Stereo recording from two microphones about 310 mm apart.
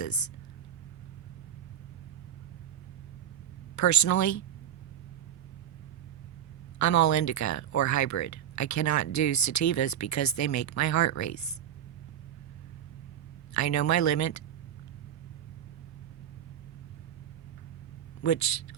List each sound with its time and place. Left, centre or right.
0.0 s speech: left
3.8 s speech: left
6.7 s speech: left
13.5 s speech: left
18.2 s speech: left